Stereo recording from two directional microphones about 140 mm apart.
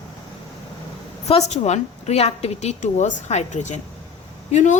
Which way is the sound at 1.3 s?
50° left (ahead or behind).